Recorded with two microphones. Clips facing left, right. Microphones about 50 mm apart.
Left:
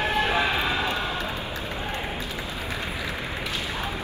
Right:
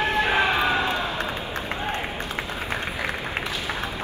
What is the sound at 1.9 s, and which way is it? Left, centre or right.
Applause, right.